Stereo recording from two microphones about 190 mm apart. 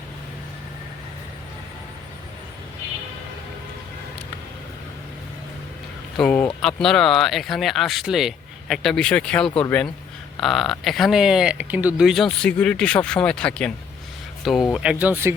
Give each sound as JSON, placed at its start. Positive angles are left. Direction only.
{"t": 6.1, "sound": "speech", "side_deg": 5}